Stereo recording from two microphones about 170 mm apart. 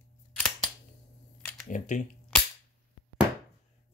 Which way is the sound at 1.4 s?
5° left (ahead or behind).